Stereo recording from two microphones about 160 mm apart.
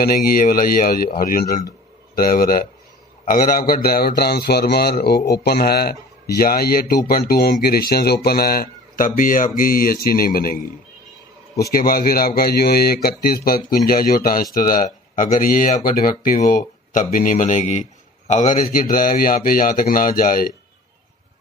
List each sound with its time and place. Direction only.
0.0 s speech: 65° left (ahead or behind)
11.7 s speech: 65° left (ahead or behind)